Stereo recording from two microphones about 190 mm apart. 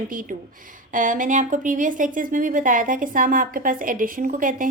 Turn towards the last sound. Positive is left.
turn(degrees=-45)  # may be behind; listen again after turning